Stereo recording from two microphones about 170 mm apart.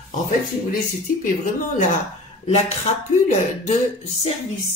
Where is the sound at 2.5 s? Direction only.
40° left (ahead or behind).